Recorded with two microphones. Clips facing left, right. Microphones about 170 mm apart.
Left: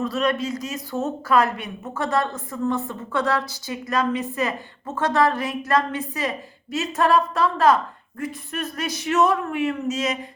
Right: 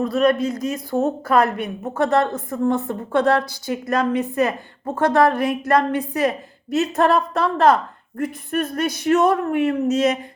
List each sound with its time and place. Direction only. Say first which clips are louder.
0.0 s a woman's voice: right 5 dB; 55° right (ahead or behind)